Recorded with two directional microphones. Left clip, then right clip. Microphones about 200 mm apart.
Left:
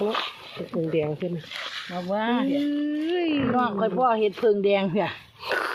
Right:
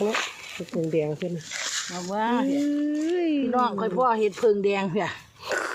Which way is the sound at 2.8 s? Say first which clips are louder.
Even; centre (ahead or behind).